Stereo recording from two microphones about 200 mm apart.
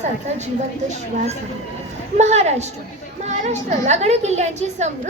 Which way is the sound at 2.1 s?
35° right (ahead or behind).